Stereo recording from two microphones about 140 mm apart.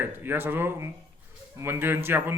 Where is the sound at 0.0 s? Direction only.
15° right (ahead or behind).